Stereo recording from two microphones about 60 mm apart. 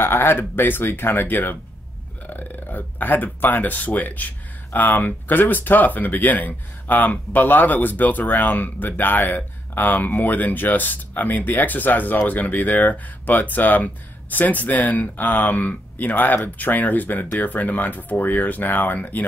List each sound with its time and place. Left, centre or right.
0.0 s speech: left